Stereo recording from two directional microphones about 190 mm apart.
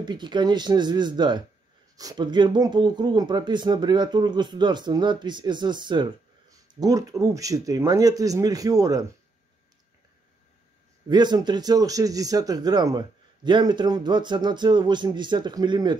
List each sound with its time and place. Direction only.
0.0 s speech: 25° right (ahead or behind)
11.1 s speech: 25° right (ahead or behind)